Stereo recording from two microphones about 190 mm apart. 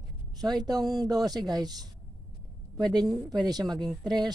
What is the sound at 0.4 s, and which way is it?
Speech, 20° right (ahead or behind).